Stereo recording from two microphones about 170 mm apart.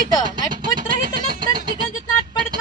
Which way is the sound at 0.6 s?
55° right (ahead or behind).